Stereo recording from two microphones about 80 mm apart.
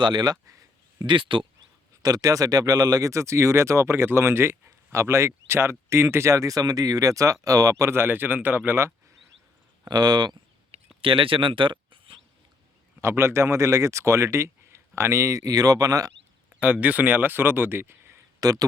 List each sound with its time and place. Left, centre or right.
0.0 s speech: right
0.9 s speech: right
2.0 s speech: right
9.9 s speech: right
11.0 s speech: right
13.0 s speech: right
16.6 s speech: centre
18.3 s speech: right